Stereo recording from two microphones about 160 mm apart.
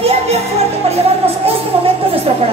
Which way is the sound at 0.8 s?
40° right (ahead or behind).